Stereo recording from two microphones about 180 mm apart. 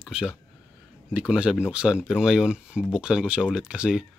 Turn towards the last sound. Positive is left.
turn(degrees=-5)  # may be behind; listen again after turning